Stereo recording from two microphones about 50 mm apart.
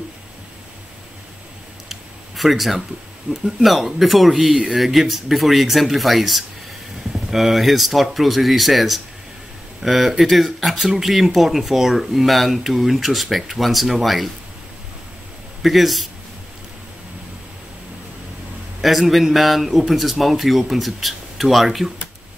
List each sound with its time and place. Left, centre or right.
1.9 s a sound: centre
3.3 s speech: centre
15.6 s speech: centre
18.8 s speech: centre